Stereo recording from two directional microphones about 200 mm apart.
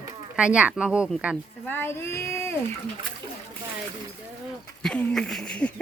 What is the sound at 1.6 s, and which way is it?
Speech, 10° left (ahead or behind).